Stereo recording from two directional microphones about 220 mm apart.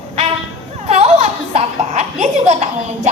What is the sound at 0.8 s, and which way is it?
Laughter, 30° right (ahead or behind).